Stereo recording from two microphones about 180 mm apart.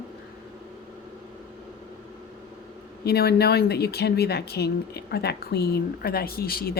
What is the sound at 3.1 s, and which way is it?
Speech, 65° left (ahead or behind).